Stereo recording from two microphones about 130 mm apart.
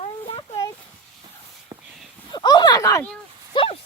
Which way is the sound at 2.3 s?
35° left (ahead or behind).